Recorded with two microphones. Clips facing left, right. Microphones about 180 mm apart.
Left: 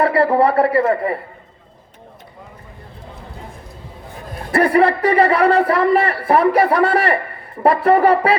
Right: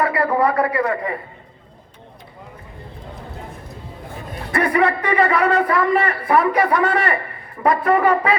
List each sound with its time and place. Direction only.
0.0 s a man's voice: 30° left (ahead or behind)
4.5 s a man's voice: 30° left (ahead or behind)